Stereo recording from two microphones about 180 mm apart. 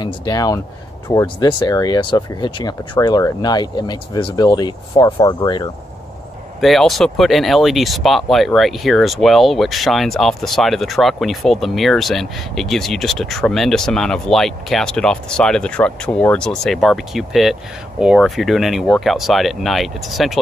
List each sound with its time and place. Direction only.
0.0 s speech: 20° left (ahead or behind)
6.6 s speech: centre (ahead or behind)